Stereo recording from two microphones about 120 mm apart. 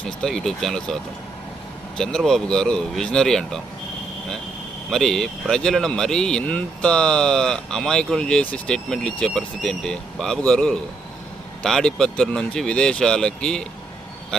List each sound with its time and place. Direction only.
0.2 s speech: 5° left (ahead or behind)
2.0 s speech: 5° left (ahead or behind)
4.9 s speech: 5° left (ahead or behind)